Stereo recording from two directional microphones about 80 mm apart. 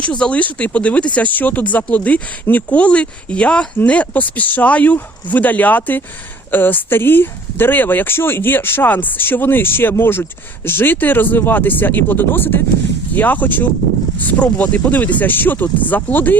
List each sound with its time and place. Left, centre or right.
0.0 s speech: centre